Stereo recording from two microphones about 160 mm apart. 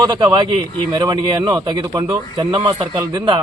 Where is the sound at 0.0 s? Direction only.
25° right (ahead or behind).